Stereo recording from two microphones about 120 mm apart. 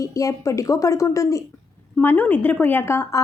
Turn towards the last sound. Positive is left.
turn(degrees=20)  # may be behind; listen again after turning